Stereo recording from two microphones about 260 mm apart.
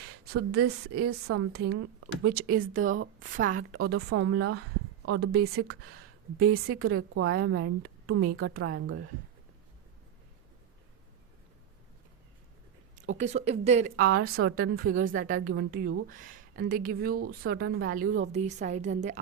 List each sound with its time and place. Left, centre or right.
0.3 s speech: right
0.9 s a woman's voice: right
2.3 s speech: right
3.8 s a woman's voice: right
5.8 s a woman's voice: right
8.2 s speech: right
13.0 s a woman's voice: right
14.1 s a woman's voice: right
14.4 s a woman's voice: right